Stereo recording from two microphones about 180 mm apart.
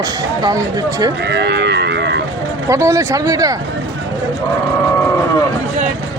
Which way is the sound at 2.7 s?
15° right (ahead or behind).